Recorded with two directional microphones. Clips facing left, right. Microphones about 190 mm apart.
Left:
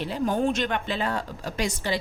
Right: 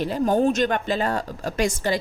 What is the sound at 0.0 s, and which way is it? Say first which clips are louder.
Speech: right 5 dB; 40° right (ahead or behind).